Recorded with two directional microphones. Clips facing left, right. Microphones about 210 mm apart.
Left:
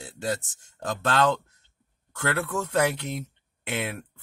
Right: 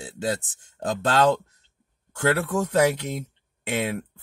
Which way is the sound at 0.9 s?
20° right (ahead or behind).